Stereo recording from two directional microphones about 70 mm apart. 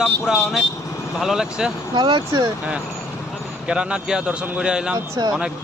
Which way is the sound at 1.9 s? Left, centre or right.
Right.